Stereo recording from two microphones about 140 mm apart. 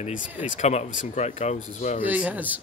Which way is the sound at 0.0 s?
65° left (ahead or behind).